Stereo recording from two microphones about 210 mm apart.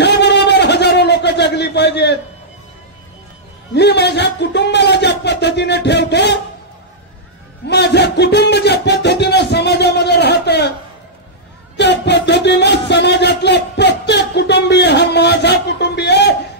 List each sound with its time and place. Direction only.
0.0 s a sound: 55° left (ahead or behind)
3.7 s speech: 55° left (ahead or behind)
7.6 s music: 55° left (ahead or behind)
11.7 s music: 55° left (ahead or behind)